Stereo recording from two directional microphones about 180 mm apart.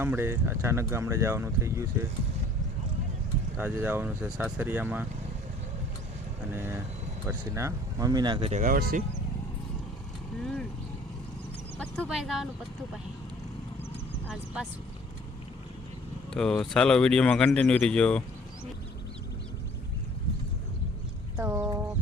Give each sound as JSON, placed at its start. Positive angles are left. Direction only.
{"t": 0.0, "sound": "speech", "side_deg": -10}
{"t": 3.6, "sound": "speech", "side_deg": -10}
{"t": 6.5, "sound": "speech", "side_deg": -15}
{"t": 8.6, "sound": "speech", "side_deg": -50}
{"t": 10.4, "sound": "vehicle", "side_deg": 5}
{"t": 11.8, "sound": "speech", "side_deg": 0}
{"t": 14.3, "sound": "speech", "side_deg": -5}
{"t": 16.3, "sound": "speech", "side_deg": 5}
{"t": 21.3, "sound": "fowl", "side_deg": -10}